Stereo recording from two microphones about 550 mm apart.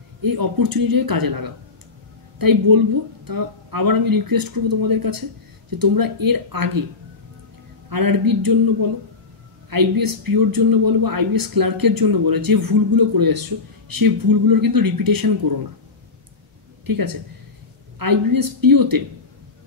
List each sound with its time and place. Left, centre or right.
0.2 s a man's voice: right
7.9 s a man's voice: right
9.7 s a man's voice: right
16.8 s a man's voice: right